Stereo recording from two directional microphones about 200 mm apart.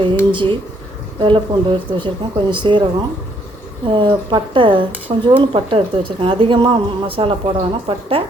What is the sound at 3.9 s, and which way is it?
A woman's voice, 25° right (ahead or behind).